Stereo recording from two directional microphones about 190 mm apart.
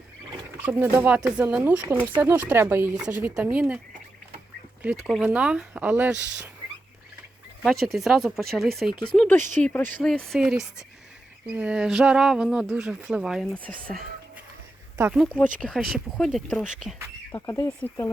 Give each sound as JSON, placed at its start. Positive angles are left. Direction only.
{"t": 0.6, "sound": "speech", "side_deg": -10}
{"t": 4.8, "sound": "speech", "side_deg": -5}
{"t": 7.6, "sound": "speech", "side_deg": 0}
{"t": 17.3, "sound": "speech", "side_deg": 15}